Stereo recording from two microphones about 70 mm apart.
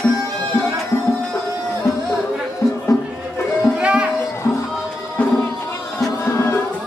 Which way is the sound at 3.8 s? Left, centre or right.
Centre.